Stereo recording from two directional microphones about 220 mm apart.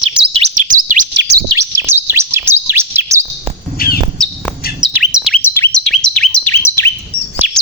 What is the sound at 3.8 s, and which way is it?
Squawk, 45° left (ahead or behind).